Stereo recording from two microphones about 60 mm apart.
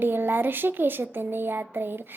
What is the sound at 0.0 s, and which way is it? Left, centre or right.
Speech, right.